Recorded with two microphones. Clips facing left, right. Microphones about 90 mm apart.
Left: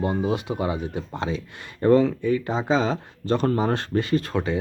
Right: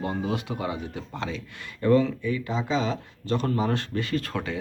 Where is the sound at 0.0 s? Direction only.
15° left (ahead or behind).